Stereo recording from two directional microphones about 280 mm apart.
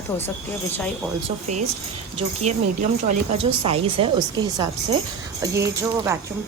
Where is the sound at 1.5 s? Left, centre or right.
Right.